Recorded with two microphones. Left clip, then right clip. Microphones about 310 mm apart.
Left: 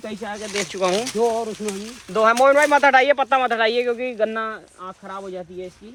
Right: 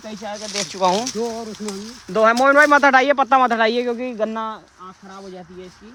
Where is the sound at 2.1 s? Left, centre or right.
Right.